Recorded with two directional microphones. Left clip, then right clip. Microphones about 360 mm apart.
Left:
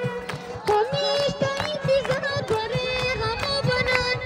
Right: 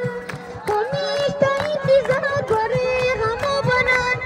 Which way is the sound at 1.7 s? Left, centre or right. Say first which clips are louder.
Right 6 dB; centre.